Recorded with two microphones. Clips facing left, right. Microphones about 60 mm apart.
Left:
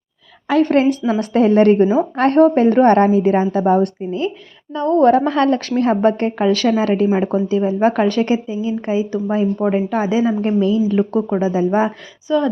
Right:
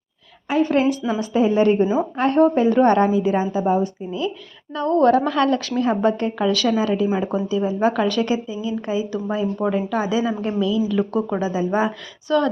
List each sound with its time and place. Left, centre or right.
0.6 s a woman's voice: left
1.2 s a woman's voice: left
4.8 s a woman's voice: left
12.3 s speech: centre